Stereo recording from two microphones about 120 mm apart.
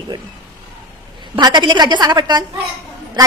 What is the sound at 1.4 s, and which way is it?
A woman's voice, 35° right (ahead or behind).